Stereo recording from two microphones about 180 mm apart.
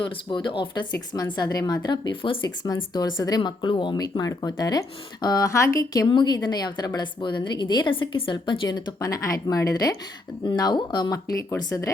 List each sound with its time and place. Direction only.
0.3 s speech: 25° left (ahead or behind)